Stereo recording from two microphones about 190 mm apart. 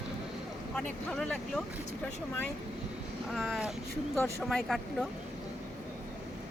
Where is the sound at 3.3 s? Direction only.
Centre (ahead or behind).